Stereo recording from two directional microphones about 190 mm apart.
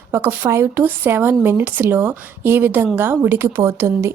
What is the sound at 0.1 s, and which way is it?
A woman's voice, 10° right (ahead or behind).